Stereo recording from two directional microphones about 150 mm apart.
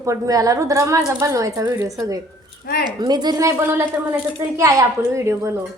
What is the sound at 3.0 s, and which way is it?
A woman's voice, 30° right (ahead or behind).